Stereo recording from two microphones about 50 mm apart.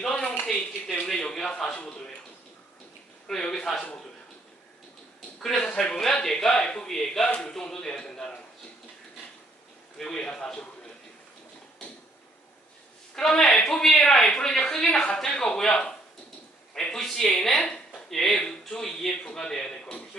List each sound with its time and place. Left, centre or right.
0.0 s a sound: centre
3.2 s speech: centre
5.4 s speech: centre
10.0 s speech: centre
13.1 s speech: centre
16.9 s speech: centre
17.6 s a sound: left
18.1 s speech: centre
18.3 s speech: centre